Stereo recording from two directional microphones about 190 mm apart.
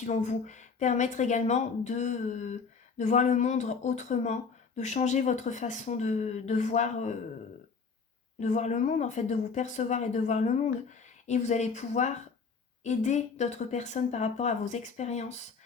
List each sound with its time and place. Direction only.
0.0 s speech: 40° left (ahead or behind)
8.4 s speech: 40° left (ahead or behind)